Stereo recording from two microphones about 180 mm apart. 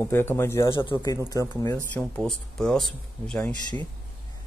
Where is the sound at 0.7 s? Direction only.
25° left (ahead or behind).